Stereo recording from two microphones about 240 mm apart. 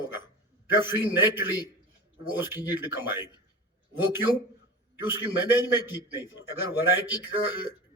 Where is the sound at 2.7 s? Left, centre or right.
Centre.